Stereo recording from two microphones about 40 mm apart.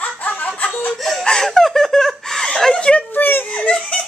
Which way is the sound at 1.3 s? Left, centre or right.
Centre.